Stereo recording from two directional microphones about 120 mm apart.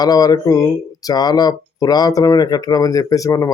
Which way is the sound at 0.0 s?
35° left (ahead or behind).